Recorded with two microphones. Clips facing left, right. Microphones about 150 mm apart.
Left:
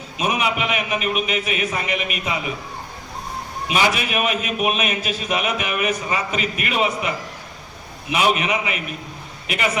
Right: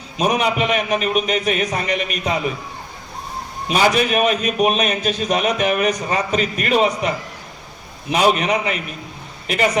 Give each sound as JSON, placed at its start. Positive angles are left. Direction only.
{"t": 0.2, "sound": "a man's voice", "side_deg": -40}
{"t": 3.7, "sound": "a man's voice", "side_deg": -40}
{"t": 8.1, "sound": "a man's voice", "side_deg": -35}